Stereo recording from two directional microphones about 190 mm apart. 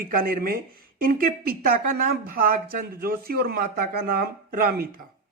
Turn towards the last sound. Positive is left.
turn(degrees=-50)  # may be behind; listen again after turning